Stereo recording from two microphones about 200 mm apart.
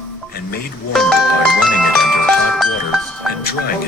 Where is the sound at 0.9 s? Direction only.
Centre (ahead or behind).